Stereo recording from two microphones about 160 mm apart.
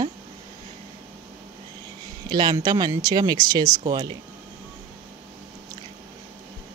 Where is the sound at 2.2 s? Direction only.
25° right (ahead or behind).